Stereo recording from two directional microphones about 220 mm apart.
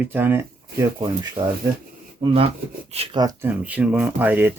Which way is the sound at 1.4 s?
25° right (ahead or behind).